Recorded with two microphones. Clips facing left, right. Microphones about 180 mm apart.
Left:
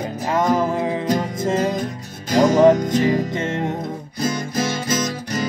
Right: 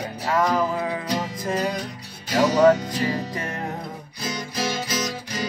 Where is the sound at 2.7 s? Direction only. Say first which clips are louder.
Left 8 dB; 45° left (ahead or behind).